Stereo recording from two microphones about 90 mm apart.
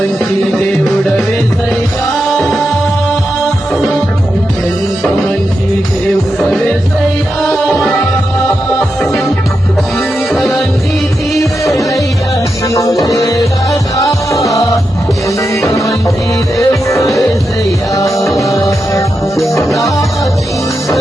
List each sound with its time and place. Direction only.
0.9 s music: 5° left (ahead or behind)
2.3 s music: centre (ahead or behind)
6.4 s music: 5° left (ahead or behind)
10.3 s music: 5° left (ahead or behind)
13.0 s music: 40° left (ahead or behind)
18.3 s music: 35° left (ahead or behind)
19.4 s music: centre (ahead or behind)